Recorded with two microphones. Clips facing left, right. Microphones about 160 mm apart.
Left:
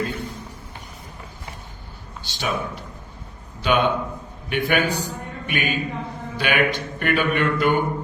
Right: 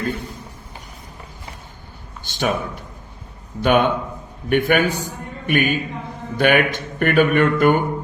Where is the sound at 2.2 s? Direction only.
50° right (ahead or behind).